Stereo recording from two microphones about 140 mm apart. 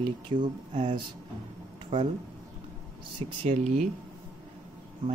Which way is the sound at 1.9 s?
40° right (ahead or behind).